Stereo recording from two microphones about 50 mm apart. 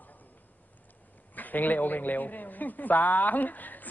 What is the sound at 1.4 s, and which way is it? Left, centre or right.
A woman's voice, left.